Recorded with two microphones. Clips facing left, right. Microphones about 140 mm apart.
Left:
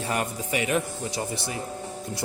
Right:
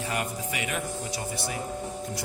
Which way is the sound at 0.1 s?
35° left (ahead or behind).